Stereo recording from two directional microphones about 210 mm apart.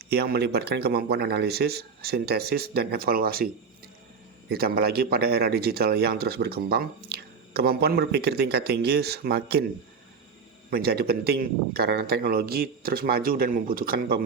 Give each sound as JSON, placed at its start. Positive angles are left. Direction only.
{"t": 0.0, "sound": "a man's voice", "side_deg": -50}
{"t": 10.7, "sound": "a man's voice", "side_deg": -45}